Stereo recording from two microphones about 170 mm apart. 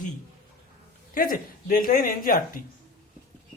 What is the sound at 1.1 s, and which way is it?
A woman's voice, 55° left (ahead or behind).